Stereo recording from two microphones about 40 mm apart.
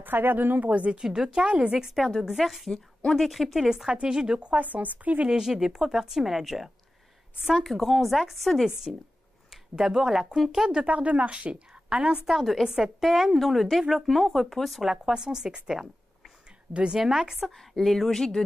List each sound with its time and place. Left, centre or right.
0.0 s speech: right
0.7 s speech: right
0.9 s speech: centre
1.4 s a woman's voice: right
2.0 s speech: centre
3.8 s a woman's voice: centre
4.4 s speech: right
4.6 s speech: right
5.4 s speech: centre
10.8 s a woman's voice: right
12.3 s speech: centre
14.9 s a woman's voice: centre
17.0 s speech: centre
17.5 s speech: centre